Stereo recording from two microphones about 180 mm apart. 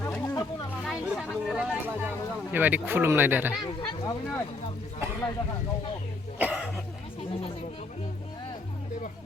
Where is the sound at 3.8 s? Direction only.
20° left (ahead or behind).